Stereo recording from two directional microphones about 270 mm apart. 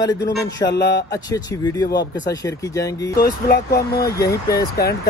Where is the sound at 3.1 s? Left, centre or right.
Left.